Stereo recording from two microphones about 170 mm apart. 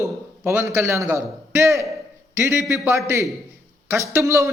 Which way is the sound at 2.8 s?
15° right (ahead or behind).